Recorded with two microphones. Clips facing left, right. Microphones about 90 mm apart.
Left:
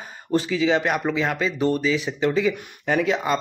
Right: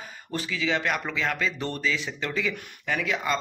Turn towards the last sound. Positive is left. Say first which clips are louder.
# left 7 dB
turn(degrees=35)  # may be behind; listen again after turning